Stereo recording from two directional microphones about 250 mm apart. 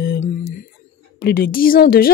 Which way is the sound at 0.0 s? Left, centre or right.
Left.